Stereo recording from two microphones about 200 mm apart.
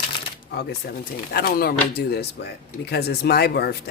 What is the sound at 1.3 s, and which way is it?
Speech, 50° left (ahead or behind).